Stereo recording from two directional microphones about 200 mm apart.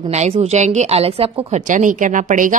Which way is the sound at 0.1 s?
30° right (ahead or behind).